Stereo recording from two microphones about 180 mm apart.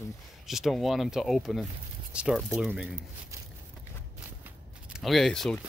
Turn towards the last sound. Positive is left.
turn(degrees=0)  # may be behind; listen again after turning